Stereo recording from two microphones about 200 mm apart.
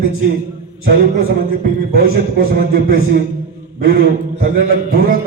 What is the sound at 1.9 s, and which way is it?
A man's voice, 50° right (ahead or behind).